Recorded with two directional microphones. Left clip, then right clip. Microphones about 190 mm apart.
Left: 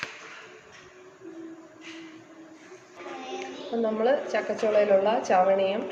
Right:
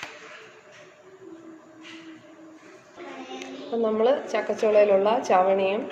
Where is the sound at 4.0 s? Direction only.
45° right (ahead or behind).